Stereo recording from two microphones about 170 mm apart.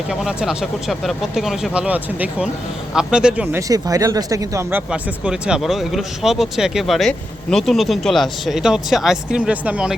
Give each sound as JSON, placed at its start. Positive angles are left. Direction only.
{"t": 0.1, "sound": "speech", "side_deg": -5}
{"t": 3.7, "sound": "speech", "side_deg": -20}
{"t": 4.9, "sound": "speech", "side_deg": -5}